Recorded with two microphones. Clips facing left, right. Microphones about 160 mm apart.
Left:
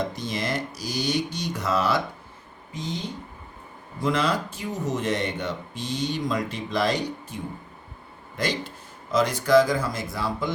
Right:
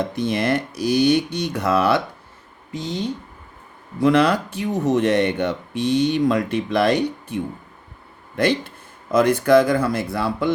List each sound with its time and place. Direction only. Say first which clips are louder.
0.2 s speech: right 8 dB; 60° right (ahead or behind)
4.0 s speech: right 8 dB; 65° right (ahead or behind)
8.4 s speech: right 8 dB; 60° right (ahead or behind)